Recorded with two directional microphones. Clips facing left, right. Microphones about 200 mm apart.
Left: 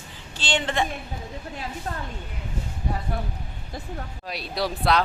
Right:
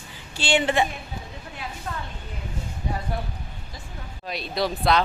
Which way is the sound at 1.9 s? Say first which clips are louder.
Even; 35° left (ahead or behind).